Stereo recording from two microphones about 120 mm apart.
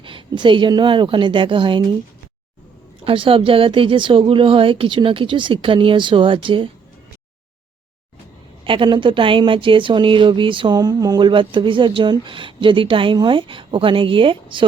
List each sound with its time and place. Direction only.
0.0 s speech: 45° right (ahead or behind)
3.0 s speech: 50° right (ahead or behind)
8.6 s speech: 45° right (ahead or behind)